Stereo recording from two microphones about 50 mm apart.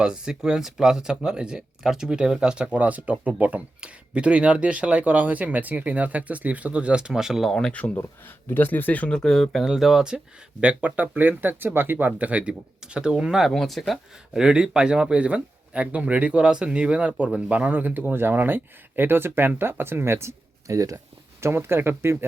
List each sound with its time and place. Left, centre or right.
0.0 s speech: centre
2.7 s speech: right; by 7.5 s centre
7.7 s speech: left
8.4 s speech: left
9.1 s speech: centre
10.6 s speech: right
12.3 s speech: centre
13.5 s speech: centre
14.3 s speech: centre; by 21.0 s right
21.4 s speech: right